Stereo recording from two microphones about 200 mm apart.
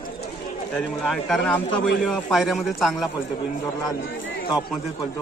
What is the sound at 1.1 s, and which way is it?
A man's voice, centre (ahead or behind).